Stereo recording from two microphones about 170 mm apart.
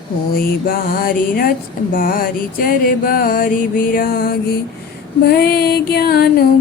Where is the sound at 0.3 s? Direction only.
65° left (ahead or behind).